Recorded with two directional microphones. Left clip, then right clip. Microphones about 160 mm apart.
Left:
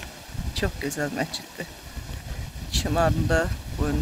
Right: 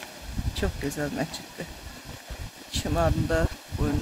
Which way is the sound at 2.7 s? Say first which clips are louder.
Left 3 dB; centre (ahead or behind).